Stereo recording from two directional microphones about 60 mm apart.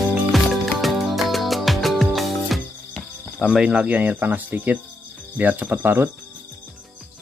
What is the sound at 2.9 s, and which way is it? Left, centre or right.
Cricket, centre.